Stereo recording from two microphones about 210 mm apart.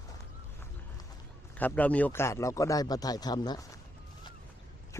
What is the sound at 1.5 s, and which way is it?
Speech, 5° left (ahead or behind).